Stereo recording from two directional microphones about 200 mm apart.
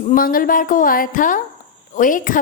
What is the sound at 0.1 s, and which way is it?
A woman's voice, 45° left (ahead or behind).